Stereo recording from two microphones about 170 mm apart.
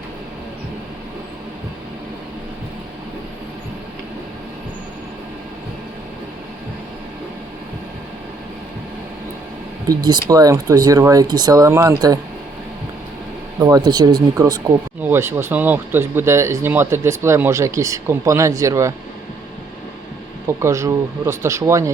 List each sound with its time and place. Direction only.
9.9 s speech: 25° right (ahead or behind)
13.6 s speech: 20° right (ahead or behind)
20.5 s speech: 15° right (ahead or behind)